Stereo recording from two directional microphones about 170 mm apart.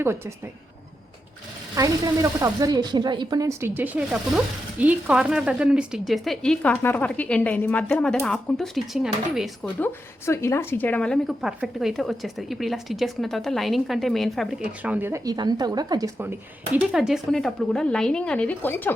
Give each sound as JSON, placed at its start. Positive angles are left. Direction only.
{"t": 0.0, "sound": "a woman's voice", "side_deg": -15}
{"t": 1.8, "sound": "speech", "side_deg": -20}
{"t": 9.8, "sound": "speech", "side_deg": 15}
{"t": 16.7, "sound": "speech", "side_deg": -5}